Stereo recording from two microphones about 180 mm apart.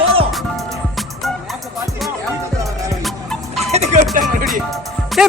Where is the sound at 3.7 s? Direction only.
40° right (ahead or behind).